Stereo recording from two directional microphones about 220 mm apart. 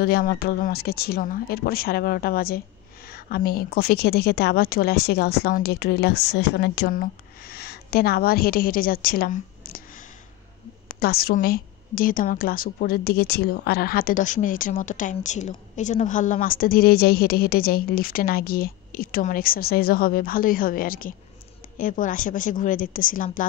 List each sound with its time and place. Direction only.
0.0 s a woman's voice: 45° left (ahead or behind)
10.9 s a woman's voice: 45° left (ahead or behind)